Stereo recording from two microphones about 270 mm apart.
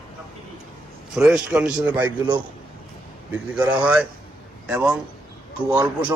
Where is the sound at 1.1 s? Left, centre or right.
Centre.